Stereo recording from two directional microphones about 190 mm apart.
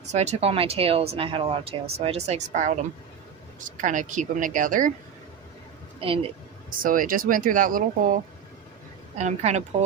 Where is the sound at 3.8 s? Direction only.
40° right (ahead or behind).